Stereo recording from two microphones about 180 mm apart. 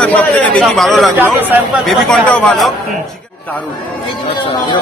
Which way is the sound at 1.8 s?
5° left (ahead or behind).